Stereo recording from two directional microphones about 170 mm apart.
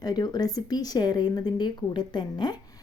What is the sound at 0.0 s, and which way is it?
Speech, 25° left (ahead or behind).